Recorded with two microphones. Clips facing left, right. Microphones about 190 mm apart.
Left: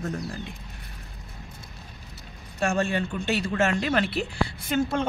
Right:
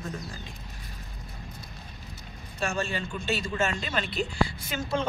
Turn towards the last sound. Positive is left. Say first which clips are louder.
# left 5 dB
turn(degrees=55)  # may be behind; listen again after turning